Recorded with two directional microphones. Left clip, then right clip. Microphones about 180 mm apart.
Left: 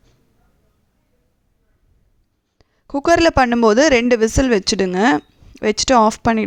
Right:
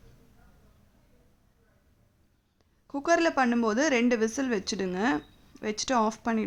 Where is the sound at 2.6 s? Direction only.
45° left (ahead or behind).